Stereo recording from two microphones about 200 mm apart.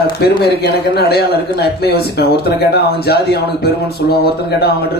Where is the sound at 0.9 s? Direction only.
55° left (ahead or behind).